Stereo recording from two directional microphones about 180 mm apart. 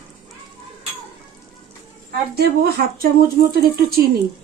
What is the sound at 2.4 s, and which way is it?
Speech, 60° right (ahead or behind).